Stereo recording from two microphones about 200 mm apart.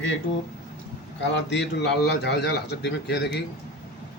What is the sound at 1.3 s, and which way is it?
Speech, 65° left (ahead or behind).